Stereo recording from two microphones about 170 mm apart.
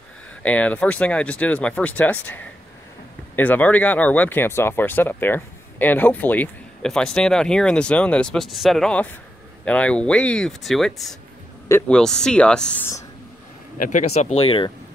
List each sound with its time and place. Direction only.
0.4 s speech: 10° left (ahead or behind)
13.7 s speech: 45° left (ahead or behind); by 14.7 s 30° left (ahead or behind)